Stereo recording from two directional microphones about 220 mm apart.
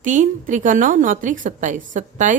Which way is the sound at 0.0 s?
35° right (ahead or behind).